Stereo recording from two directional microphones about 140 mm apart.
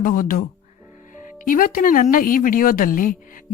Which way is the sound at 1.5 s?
80° left.